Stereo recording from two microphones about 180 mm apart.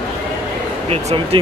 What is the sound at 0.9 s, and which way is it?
Speech, 35° right (ahead or behind).